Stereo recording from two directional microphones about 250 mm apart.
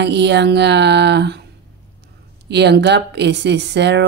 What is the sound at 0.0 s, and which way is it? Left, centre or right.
Speech, right.